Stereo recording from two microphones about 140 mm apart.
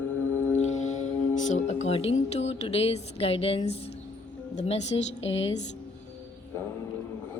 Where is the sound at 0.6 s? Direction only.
60° left (ahead or behind).